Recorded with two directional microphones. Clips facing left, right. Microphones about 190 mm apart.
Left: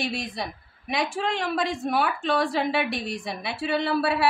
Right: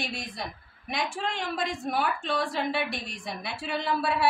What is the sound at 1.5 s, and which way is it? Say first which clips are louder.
A woman's voice: left 4 dB; 75° left (ahead or behind).